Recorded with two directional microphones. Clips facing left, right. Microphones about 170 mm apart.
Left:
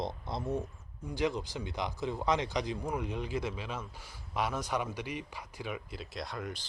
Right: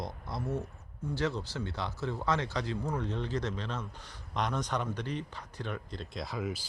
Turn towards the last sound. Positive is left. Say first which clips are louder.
# right 3 dB
turn(degrees=-5)  # may be behind; listen again after turning